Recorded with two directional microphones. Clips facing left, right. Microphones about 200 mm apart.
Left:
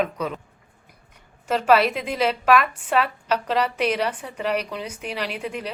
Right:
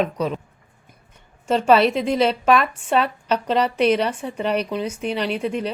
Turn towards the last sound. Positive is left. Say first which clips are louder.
# right 6 dB
turn(degrees=-25)  # may be behind; listen again after turning